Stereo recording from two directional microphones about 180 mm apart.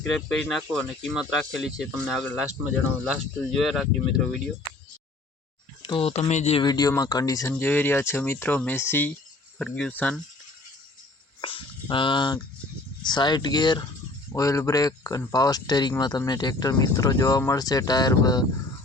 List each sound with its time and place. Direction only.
0.0 s speech: centre (ahead or behind)
5.8 s speech: 30° left (ahead or behind)
6.7 s speech: 20° left (ahead or behind)
11.3 s speech: 30° left (ahead or behind)